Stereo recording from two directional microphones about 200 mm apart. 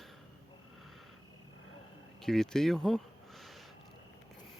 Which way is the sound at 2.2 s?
Centre (ahead or behind).